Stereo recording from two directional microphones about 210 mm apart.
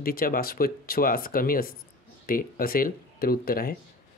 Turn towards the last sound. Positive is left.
turn(degrees=45)  # may be behind; listen again after turning